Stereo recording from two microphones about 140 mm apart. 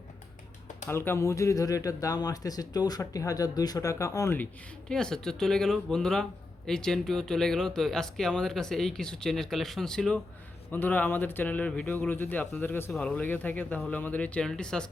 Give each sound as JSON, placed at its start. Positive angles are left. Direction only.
{"t": 0.9, "sound": "speech", "side_deg": 15}
{"t": 4.9, "sound": "a man's voice", "side_deg": 5}